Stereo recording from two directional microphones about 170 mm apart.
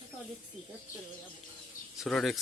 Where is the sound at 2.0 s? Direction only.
Centre (ahead or behind).